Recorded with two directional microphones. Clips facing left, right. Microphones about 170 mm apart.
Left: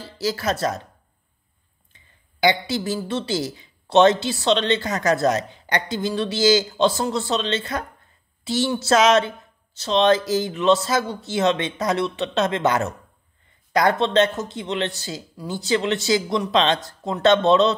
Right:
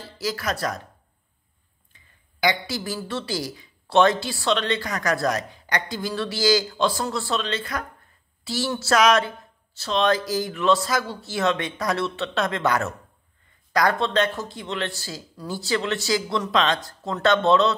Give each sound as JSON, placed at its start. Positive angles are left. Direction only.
{"t": 0.0, "sound": "a man's voice", "side_deg": 30}
{"t": 2.4, "sound": "a man's voice", "side_deg": 25}